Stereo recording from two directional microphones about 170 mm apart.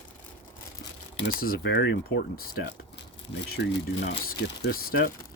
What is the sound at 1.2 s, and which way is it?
Speech, 60° left (ahead or behind).